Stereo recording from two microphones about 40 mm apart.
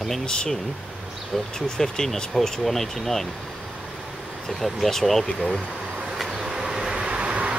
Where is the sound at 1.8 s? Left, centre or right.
Centre.